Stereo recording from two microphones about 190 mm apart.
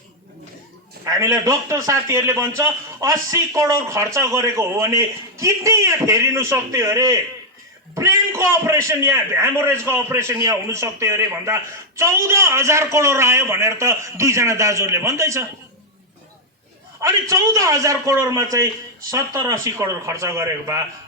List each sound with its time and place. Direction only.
1.0 s a man's voice: 15° right (ahead or behind)
17.0 s a man's voice: 15° right (ahead or behind)